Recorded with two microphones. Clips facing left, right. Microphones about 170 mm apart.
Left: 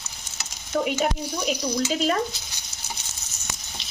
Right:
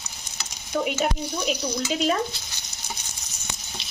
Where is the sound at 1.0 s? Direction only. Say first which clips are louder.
Even; 5° right (ahead or behind).